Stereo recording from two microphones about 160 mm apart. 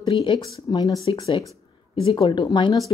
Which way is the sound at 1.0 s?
35° left (ahead or behind).